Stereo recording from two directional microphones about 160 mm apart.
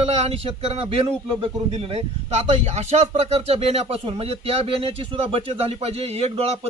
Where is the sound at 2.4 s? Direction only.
45° right (ahead or behind).